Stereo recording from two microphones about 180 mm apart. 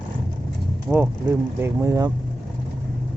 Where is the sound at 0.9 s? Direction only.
5° right (ahead or behind).